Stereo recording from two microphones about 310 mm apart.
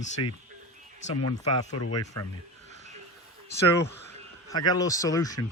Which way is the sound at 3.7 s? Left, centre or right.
Centre.